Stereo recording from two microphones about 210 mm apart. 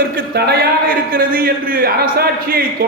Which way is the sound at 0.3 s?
50° right (ahead or behind).